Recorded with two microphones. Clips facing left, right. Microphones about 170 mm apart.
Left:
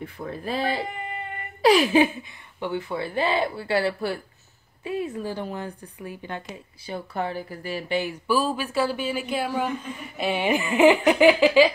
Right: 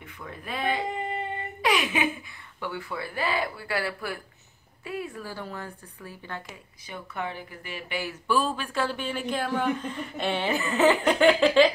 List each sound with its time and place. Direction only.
0.0 s speech: 35° left (ahead or behind)
6.9 s speech: 35° left (ahead or behind)
8.0 s speech: 10° left (ahead or behind)